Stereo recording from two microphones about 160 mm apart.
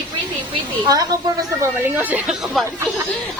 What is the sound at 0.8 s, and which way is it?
Speech, 25° right (ahead or behind).